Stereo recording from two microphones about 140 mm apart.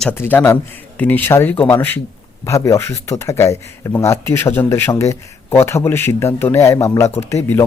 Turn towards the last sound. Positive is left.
turn(degrees=15)  # may be behind; listen again after turning